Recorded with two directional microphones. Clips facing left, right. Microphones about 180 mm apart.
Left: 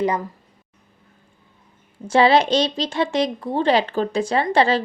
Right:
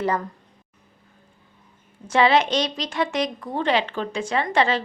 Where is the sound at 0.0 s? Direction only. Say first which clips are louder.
Left 3 dB; 15° left (ahead or behind).